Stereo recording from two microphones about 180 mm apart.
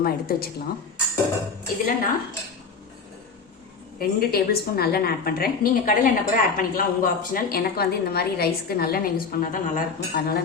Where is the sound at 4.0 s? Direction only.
60° left (ahead or behind).